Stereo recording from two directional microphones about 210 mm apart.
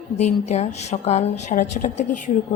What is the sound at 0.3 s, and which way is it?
A woman's voice, 35° left (ahead or behind).